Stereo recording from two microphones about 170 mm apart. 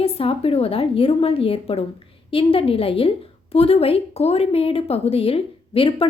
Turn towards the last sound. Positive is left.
turn(degrees=30)  # may be behind; listen again after turning